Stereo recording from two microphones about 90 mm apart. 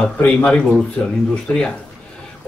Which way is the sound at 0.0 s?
10° left (ahead or behind).